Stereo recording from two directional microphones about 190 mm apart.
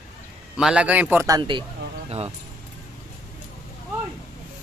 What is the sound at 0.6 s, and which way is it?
Speech, 5° right (ahead or behind).